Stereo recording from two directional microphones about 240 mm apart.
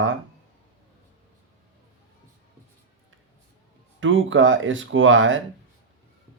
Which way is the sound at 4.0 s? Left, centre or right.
Right.